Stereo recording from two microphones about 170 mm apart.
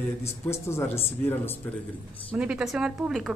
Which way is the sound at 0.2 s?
15° left (ahead or behind).